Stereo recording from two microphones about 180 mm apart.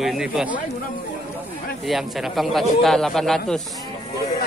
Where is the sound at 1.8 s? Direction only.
Centre (ahead or behind).